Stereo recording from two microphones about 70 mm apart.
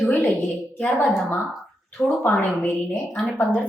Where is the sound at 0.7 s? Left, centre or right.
Left.